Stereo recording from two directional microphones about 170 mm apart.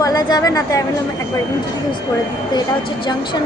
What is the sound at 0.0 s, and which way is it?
Speech, 20° left (ahead or behind).